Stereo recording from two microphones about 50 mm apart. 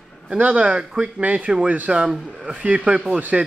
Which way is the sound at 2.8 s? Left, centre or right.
Centre.